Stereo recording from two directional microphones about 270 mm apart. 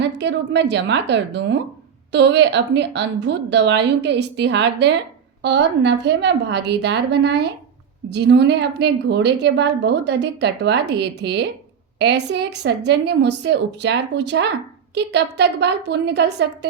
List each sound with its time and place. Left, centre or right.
0.0 s a woman's voice: right